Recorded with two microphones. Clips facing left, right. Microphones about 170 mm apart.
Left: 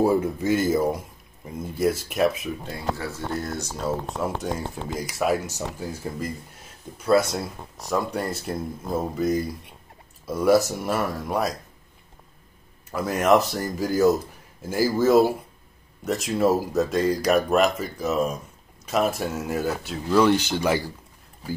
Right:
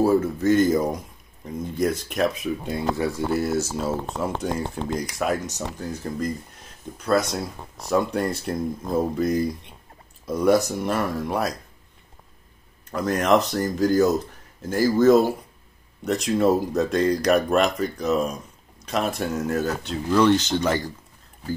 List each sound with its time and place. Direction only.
0.0 s speech: 15° left (ahead or behind)
3.0 s speech: 10° right (ahead or behind); by 6.3 s 5° left (ahead or behind)
7.3 s speech: centre (ahead or behind)
12.9 s speech: 5° left (ahead or behind)